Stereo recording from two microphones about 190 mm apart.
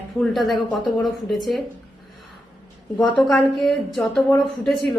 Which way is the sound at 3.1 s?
Centre (ahead or behind).